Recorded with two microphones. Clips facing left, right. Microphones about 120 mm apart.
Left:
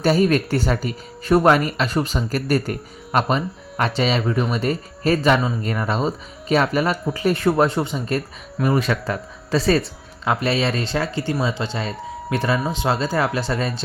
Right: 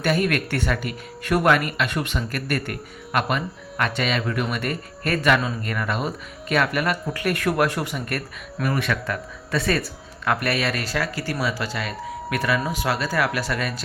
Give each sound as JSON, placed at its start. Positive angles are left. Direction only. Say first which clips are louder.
{"t": 0.3, "sound": "speech", "louder": "left 4 dB", "side_deg": 30}